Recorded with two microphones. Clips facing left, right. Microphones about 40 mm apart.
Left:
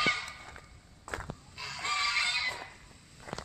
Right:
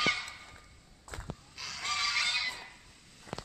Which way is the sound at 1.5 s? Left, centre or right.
Left.